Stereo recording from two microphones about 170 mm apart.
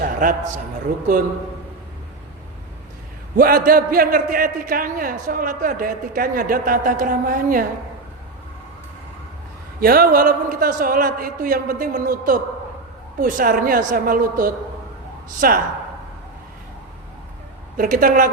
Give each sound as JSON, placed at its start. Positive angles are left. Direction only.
{"t": 0.0, "sound": "a sound", "side_deg": -55}
{"t": 3.3, "sound": "a man's voice", "side_deg": -55}
{"t": 9.8, "sound": "a man's voice", "side_deg": -60}
{"t": 17.7, "sound": "a man's voice", "side_deg": -55}